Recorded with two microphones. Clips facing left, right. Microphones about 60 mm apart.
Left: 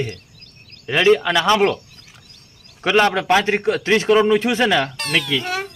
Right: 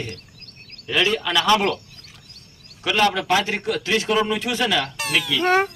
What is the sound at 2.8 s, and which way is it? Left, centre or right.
Speech, left.